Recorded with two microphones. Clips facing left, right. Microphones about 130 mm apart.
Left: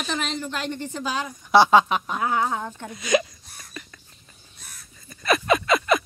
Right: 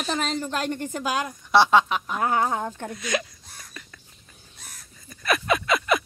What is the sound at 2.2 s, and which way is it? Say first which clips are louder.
Speech: right 2 dB; 45° right (ahead or behind).